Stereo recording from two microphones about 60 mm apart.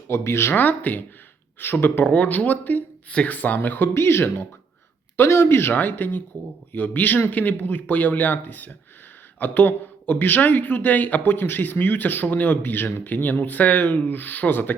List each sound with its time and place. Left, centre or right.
0.1 s speech: left
0.5 s speech: left
2.0 s speech: left
5.7 s speech: left